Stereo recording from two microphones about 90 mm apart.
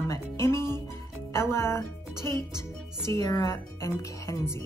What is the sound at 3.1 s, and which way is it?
Speech, 40° left (ahead or behind).